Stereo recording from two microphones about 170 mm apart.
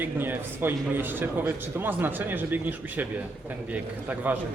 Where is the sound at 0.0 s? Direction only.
10° right (ahead or behind).